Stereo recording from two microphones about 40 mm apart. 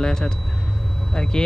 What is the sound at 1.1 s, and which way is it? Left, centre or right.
Speech, centre.